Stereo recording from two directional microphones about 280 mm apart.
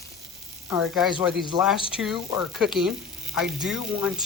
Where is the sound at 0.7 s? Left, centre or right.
Centre.